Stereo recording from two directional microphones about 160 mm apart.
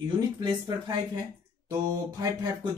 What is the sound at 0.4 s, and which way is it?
Speech, 30° right (ahead or behind).